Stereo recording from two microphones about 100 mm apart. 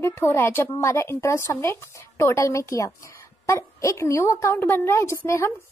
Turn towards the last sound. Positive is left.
turn(degrees=25)  # may be behind; listen again after turning